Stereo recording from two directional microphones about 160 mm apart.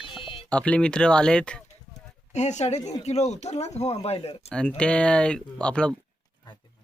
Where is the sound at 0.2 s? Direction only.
35° left (ahead or behind).